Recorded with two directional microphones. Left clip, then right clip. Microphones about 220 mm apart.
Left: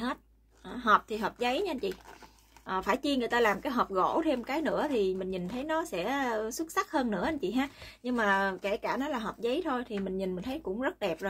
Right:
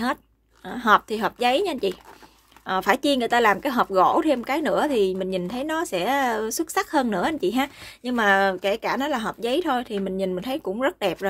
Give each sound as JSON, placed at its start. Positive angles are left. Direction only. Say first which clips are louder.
{"t": 0.7, "sound": "speech", "louder": "right 7 dB", "side_deg": -45}